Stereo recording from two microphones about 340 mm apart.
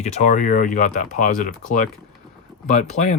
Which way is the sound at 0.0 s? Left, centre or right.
Left.